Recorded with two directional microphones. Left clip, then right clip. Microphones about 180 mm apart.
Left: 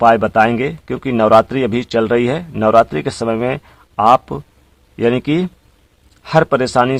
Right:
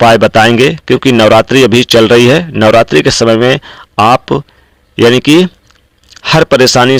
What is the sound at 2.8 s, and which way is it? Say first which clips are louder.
Speech: right 11 dB; 30° right (ahead or behind).